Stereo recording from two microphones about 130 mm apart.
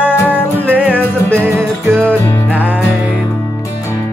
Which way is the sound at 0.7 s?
10° right (ahead or behind).